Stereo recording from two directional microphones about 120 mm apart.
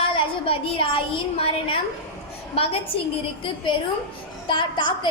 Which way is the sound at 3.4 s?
45° left (ahead or behind).